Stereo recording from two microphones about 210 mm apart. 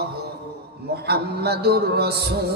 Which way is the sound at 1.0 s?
50° right (ahead or behind).